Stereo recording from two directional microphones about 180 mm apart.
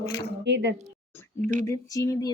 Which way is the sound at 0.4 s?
75° right (ahead or behind).